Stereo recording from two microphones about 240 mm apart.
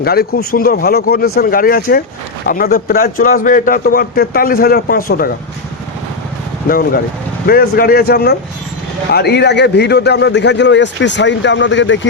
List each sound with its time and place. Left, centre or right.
0.0 s a man's voice: left
6.7 s a man's voice: left